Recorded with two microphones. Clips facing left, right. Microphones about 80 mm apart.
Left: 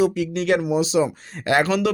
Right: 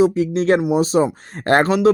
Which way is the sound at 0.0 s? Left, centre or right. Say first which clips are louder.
Right 5 dB; right.